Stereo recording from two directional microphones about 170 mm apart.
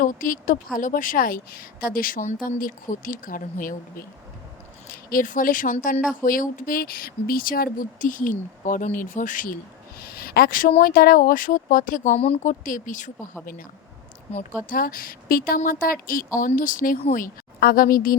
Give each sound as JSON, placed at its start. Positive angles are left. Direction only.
{"t": 0.0, "sound": "a woman's voice", "side_deg": 50}
{"t": 10.0, "sound": "a woman's voice", "side_deg": 60}